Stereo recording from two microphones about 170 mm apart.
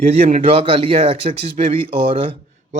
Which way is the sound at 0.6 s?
30° right (ahead or behind).